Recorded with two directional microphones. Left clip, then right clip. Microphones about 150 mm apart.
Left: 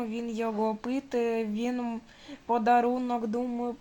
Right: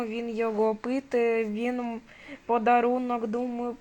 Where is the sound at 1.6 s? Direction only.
10° right (ahead or behind).